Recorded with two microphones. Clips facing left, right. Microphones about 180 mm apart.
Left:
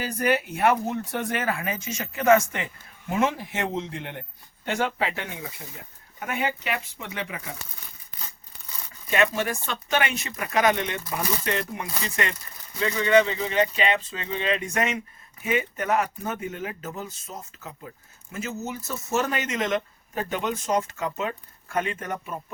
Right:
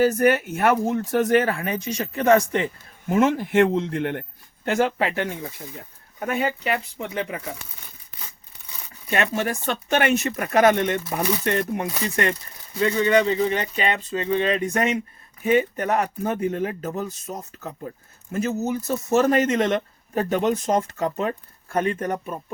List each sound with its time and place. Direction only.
0.0 s speech: 50° right (ahead or behind)
9.0 s speech: 45° right (ahead or behind)